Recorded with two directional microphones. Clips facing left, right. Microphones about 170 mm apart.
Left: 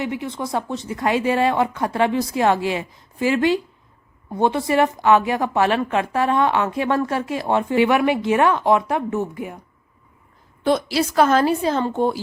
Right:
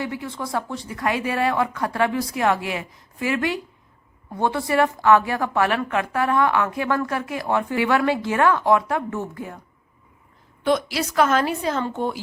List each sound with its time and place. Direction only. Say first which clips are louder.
0.0 s a woman's voice: left 3 dB; 20° left (ahead or behind)
10.6 s a woman's voice: left 2 dB; 35° left (ahead or behind)